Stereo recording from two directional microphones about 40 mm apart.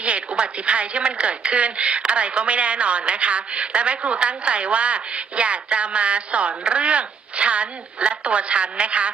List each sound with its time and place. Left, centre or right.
0.0 s a woman's voice: right